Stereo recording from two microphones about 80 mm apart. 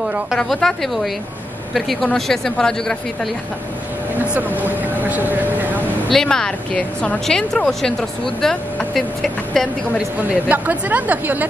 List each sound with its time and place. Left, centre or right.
0.4 s speech: centre
4.4 s speech: right
6.1 s a woman's voice: centre
10.5 s speech: right